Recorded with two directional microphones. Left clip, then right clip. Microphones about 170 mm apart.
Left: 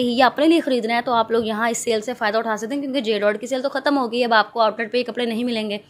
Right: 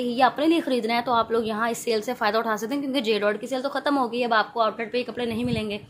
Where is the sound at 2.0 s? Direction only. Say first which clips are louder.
Left 2 dB; 20° left (ahead or behind).